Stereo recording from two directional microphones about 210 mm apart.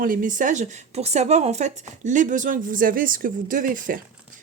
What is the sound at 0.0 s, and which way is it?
Speech, 40° right (ahead or behind).